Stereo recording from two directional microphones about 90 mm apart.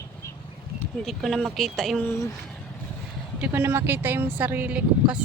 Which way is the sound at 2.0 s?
30° left (ahead or behind).